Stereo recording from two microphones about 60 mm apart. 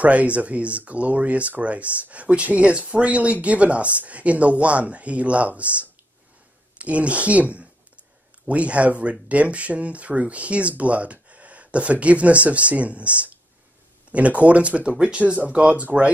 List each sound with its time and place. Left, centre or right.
0.0 s speech: right
6.8 s speech: right
8.5 s speech: right